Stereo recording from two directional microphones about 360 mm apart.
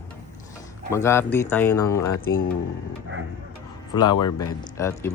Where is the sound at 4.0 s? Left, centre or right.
Left.